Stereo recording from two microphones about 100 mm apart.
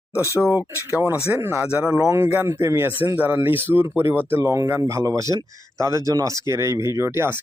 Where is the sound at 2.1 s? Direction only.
25° right (ahead or behind).